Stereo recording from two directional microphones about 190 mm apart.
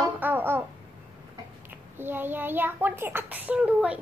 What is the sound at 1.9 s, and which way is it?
A child's voice, 10° right (ahead or behind).